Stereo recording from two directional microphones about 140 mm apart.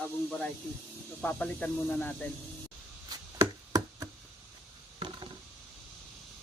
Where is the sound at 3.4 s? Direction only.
25° right (ahead or behind).